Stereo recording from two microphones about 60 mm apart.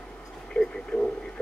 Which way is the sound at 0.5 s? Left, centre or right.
Centre.